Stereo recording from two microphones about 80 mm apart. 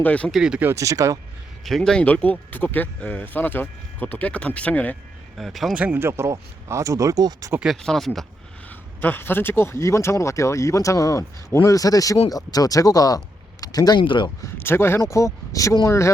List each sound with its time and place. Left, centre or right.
0.0 s speech: centre
0.3 s speech: centre
0.8 s speech: right
1.6 s speech: centre
5.4 s speech: centre
5.7 s speech: centre
6.0 s speech: right
7.8 s speech: centre
9.0 s speech: left
14.0 s speech: left
14.4 s speech: left